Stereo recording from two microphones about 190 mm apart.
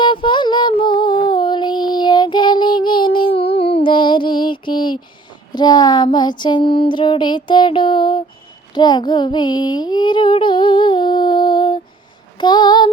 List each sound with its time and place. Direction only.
0.0 s female singing: 25° left (ahead or behind)
5.5 s child singing: 20° left (ahead or behind)
8.7 s female singing: 20° left (ahead or behind)
12.4 s a sound: 25° left (ahead or behind)